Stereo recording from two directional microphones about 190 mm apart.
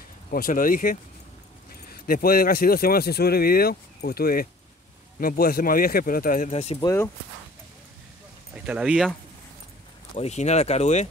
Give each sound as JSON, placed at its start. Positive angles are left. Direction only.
{"t": 0.3, "sound": "speech", "side_deg": 45}
{"t": 6.8, "sound": "speech", "side_deg": 15}
{"t": 8.5, "sound": "speech", "side_deg": -5}
{"t": 10.1, "sound": "speech", "side_deg": 35}